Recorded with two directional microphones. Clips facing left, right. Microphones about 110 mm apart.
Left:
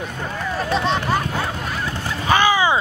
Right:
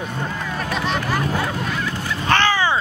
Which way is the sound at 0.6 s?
30° left (ahead or behind).